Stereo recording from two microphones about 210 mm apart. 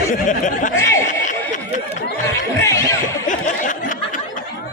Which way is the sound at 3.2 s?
40° left (ahead or behind).